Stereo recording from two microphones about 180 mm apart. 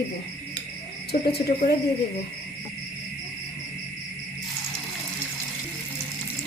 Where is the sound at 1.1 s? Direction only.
55° left (ahead or behind).